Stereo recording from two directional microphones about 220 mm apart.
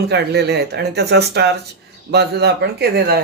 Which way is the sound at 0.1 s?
50° right (ahead or behind).